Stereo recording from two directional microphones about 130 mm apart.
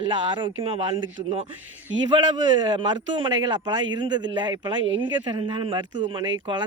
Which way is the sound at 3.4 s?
35° right (ahead or behind).